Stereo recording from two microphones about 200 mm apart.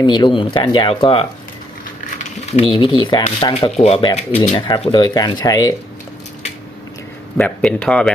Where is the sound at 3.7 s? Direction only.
30° left (ahead or behind).